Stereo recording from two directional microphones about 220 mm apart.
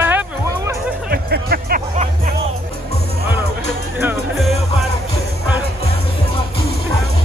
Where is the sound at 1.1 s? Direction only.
45° right (ahead or behind).